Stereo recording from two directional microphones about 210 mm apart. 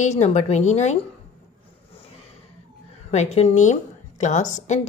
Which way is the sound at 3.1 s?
35° left (ahead or behind).